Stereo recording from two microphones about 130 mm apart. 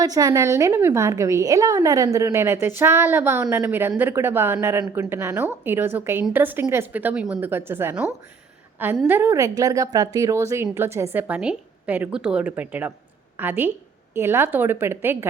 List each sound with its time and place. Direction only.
0.0 s a woman's voice: 30° right (ahead or behind)